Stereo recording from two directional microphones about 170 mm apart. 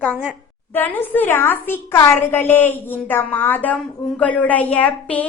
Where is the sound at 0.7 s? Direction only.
10° left (ahead or behind).